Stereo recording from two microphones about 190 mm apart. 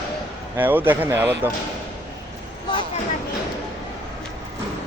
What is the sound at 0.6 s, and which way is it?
Speech, 10° right (ahead or behind).